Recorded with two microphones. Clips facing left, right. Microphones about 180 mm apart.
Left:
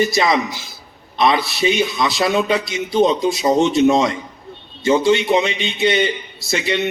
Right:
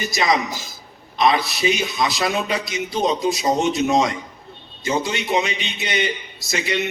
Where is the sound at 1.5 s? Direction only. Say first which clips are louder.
Left 4 dB; 30° left (ahead or behind).